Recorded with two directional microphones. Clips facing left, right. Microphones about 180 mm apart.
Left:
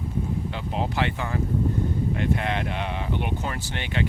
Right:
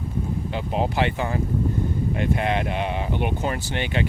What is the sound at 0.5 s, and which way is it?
Speech, 15° right (ahead or behind).